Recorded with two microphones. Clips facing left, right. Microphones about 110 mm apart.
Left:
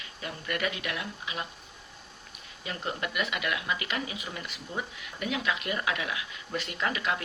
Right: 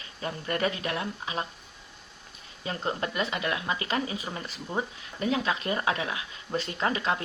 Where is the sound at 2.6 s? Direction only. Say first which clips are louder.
Right 3 dB; 30° right (ahead or behind).